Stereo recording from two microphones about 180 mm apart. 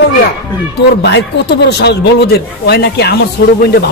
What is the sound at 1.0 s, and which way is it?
Speech, 70° left (ahead or behind).